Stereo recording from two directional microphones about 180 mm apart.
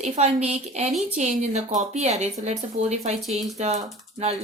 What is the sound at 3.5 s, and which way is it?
Speech, 40° right (ahead or behind).